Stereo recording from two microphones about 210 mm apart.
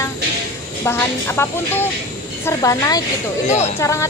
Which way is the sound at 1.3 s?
10° left (ahead or behind).